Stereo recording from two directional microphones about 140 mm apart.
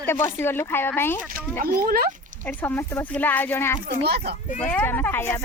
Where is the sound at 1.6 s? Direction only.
90° right.